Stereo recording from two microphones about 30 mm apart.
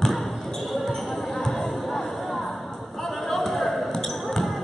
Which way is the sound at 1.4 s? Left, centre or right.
Centre.